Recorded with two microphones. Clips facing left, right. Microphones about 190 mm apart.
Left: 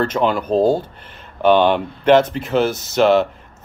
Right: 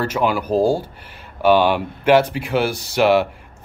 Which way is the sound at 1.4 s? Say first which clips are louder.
Left 1 dB; 10° right (ahead or behind).